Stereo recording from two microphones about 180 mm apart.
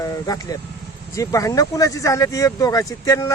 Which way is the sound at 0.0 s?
20° left (ahead or behind).